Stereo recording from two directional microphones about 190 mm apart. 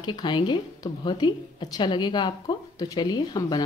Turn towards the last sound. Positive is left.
turn(degrees=20)  # may be behind; listen again after turning